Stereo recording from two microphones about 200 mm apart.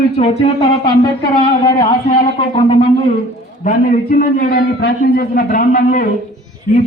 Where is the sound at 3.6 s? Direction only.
40° left (ahead or behind).